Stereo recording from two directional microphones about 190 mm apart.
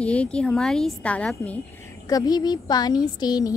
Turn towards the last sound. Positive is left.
turn(degrees=20)  # may be behind; listen again after turning